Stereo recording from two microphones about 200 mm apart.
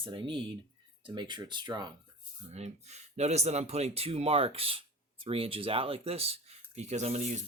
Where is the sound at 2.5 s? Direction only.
35° right (ahead or behind).